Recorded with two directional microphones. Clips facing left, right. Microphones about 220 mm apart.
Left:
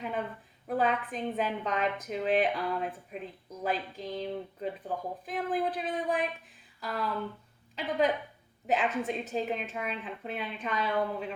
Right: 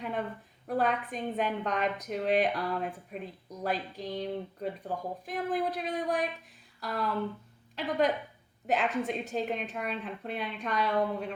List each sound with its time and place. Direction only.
0.0 s a woman's voice: centre (ahead or behind)